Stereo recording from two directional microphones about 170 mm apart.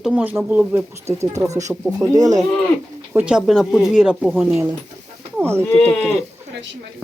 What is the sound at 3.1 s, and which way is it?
Speech, 5° right (ahead or behind).